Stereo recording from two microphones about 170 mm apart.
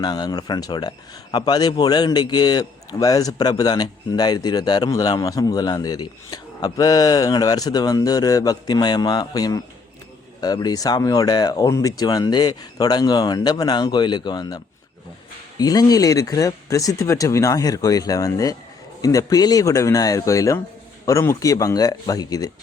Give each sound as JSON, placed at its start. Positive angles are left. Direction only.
{"t": 0.0, "sound": "speech", "side_deg": 25}